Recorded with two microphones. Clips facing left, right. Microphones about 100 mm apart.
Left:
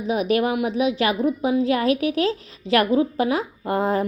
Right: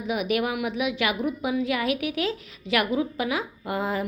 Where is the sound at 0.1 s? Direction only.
35° left (ahead or behind).